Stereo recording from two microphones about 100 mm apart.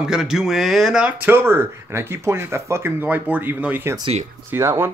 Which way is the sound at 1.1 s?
20° right (ahead or behind).